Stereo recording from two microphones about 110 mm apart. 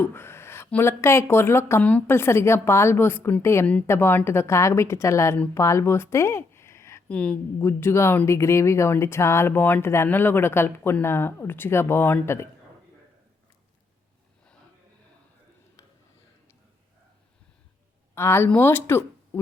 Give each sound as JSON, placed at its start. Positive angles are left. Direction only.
{"t": 0.0, "sound": "a sound", "side_deg": 20}
{"t": 0.7, "sound": "speech", "side_deg": 20}
{"t": 1.8, "sound": "a woman's voice", "side_deg": 15}
{"t": 2.1, "sound": "speech", "side_deg": 25}
{"t": 7.1, "sound": "a woman's voice", "side_deg": 10}
{"t": 7.6, "sound": "speech", "side_deg": 25}
{"t": 18.1, "sound": "a woman's voice", "side_deg": 25}